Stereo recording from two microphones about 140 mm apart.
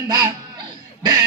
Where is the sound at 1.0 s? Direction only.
30° right (ahead or behind).